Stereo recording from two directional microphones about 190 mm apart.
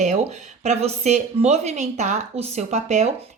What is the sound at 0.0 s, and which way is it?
Speech, 35° right (ahead or behind).